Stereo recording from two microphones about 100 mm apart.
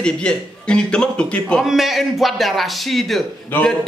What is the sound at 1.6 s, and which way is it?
Speech, 5° right (ahead or behind).